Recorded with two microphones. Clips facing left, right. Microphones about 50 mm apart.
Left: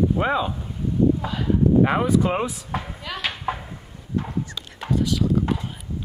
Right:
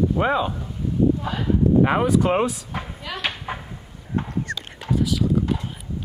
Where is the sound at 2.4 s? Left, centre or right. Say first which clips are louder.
Right 1 dB; centre.